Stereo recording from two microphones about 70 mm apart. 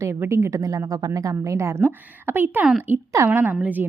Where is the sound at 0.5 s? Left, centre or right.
Right.